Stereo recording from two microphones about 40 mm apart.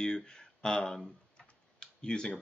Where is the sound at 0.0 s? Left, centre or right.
Centre.